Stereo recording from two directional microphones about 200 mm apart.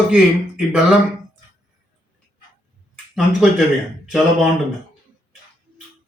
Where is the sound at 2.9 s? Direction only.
Centre (ahead or behind).